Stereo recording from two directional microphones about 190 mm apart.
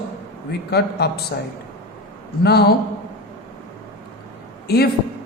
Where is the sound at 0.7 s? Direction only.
60° left (ahead or behind).